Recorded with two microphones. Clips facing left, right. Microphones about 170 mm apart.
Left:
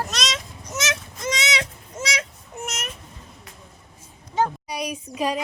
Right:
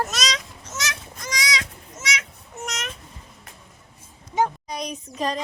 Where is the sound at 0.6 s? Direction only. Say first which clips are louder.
Left 5 dB; 20° left (ahead or behind).